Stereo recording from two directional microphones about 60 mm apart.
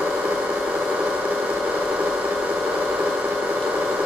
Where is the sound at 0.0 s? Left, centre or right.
Centre.